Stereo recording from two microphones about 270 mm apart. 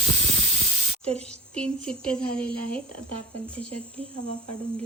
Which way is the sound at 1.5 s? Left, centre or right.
Centre.